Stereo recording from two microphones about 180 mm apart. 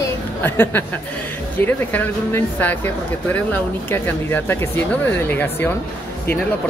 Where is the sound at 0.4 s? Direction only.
10° left (ahead or behind).